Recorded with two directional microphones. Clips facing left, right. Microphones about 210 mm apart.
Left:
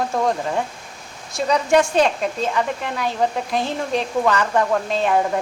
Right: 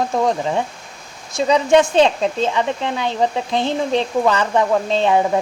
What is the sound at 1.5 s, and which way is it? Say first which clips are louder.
Speech: right 3 dB; 20° right (ahead or behind).